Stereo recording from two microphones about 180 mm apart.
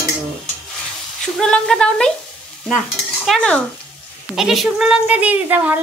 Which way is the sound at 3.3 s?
5° left (ahead or behind).